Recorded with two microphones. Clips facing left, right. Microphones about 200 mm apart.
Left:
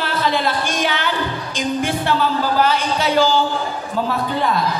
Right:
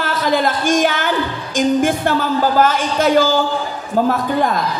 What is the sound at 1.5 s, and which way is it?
Speech, 45° right (ahead or behind).